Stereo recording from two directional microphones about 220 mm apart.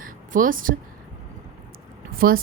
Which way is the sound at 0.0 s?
40° right (ahead or behind).